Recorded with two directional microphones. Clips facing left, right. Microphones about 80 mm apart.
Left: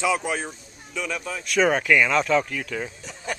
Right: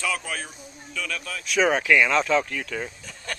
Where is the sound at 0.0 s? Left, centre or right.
Centre.